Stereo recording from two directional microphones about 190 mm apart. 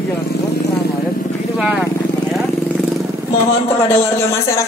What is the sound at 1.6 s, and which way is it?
Speech, 5° right (ahead or behind).